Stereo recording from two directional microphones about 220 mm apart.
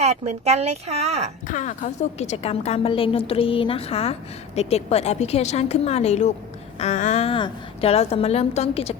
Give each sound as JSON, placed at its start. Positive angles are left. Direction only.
{"t": 0.0, "sound": "speech", "side_deg": -30}
{"t": 1.5, "sound": "a woman's voice", "side_deg": 35}